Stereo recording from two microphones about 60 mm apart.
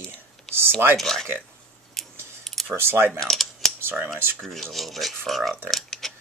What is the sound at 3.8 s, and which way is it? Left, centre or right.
Speech, right.